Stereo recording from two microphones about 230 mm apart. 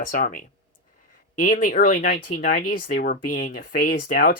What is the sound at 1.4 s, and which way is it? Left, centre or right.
Speech, left.